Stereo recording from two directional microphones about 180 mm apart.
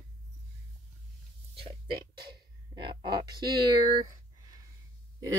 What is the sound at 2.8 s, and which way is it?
Speech, 25° right (ahead or behind).